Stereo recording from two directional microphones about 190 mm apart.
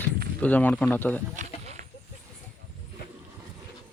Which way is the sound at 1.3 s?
40° right (ahead or behind).